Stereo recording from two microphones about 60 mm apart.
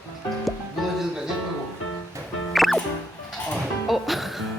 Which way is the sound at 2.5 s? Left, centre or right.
Centre.